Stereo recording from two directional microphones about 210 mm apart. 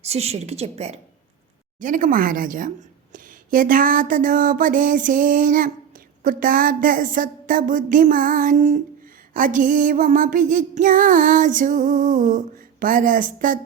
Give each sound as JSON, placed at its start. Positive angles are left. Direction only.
{"t": 0.0, "sound": "a woman's voice", "side_deg": -30}
{"t": 1.8, "sound": "a woman's voice", "side_deg": -40}